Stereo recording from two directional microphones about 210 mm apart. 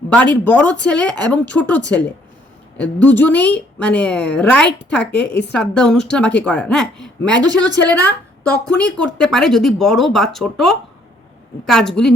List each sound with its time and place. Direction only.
0.1 s a woman's voice: 5° left (ahead or behind)
7.4 s speech: 20° right (ahead or behind)
7.9 s a woman's voice: 5° left (ahead or behind)